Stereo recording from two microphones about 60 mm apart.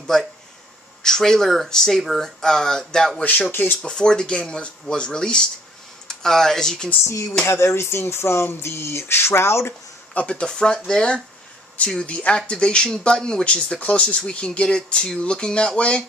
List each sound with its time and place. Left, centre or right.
0.0 s speech: centre
3.3 s speech: left
3.8 s speech: centre
7.4 s a sound: left
10.1 s speech: centre